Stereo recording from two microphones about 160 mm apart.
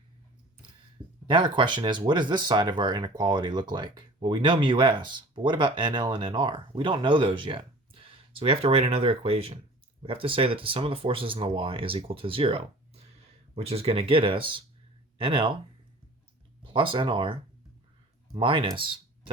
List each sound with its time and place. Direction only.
1.3 s speech: 30° right (ahead or behind)
16.6 s speech: 30° right (ahead or behind)
18.3 s speech: 35° right (ahead or behind)